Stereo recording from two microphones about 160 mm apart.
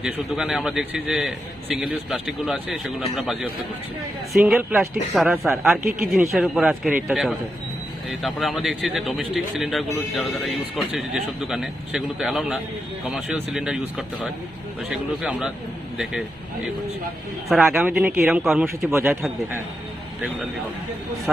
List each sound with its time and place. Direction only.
0.0 s speech: 5° right (ahead or behind)
17.5 s speech: centre (ahead or behind)
18.9 s speech: 15° right (ahead or behind)